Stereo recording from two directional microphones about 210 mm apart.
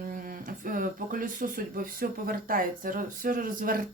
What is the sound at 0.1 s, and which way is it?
Speech, 40° right (ahead or behind).